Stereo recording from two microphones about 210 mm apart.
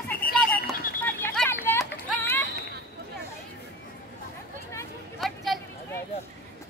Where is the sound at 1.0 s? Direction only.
10° left (ahead or behind).